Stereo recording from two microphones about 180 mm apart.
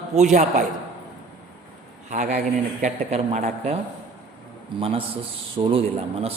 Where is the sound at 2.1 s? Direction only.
40° right (ahead or behind).